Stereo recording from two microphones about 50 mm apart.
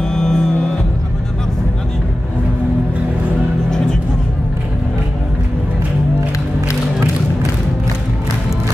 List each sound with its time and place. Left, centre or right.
0.0 s music: centre